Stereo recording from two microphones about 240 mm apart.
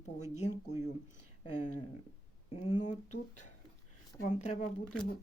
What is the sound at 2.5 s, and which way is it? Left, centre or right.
Speech, left.